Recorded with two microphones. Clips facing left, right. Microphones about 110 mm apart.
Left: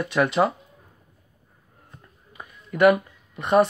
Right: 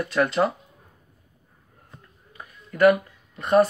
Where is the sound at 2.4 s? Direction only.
15° left (ahead or behind).